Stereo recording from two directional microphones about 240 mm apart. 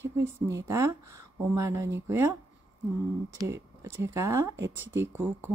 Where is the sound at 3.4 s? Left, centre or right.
Centre.